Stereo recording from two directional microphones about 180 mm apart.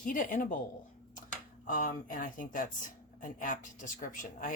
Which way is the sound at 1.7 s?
50° left (ahead or behind).